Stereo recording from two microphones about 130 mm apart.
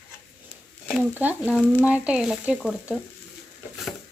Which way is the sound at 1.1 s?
15° right (ahead or behind).